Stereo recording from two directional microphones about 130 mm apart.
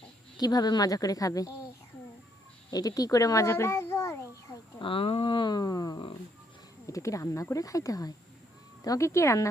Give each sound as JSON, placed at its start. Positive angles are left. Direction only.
{"t": 0.3, "sound": "speech", "side_deg": 30}
{"t": 2.6, "sound": "a child's voice", "side_deg": 30}
{"t": 4.8, "sound": "a sound", "side_deg": 45}
{"t": 6.8, "sound": "speech", "side_deg": 25}